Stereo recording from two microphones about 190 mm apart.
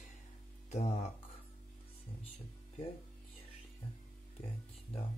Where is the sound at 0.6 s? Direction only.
35° left (ahead or behind).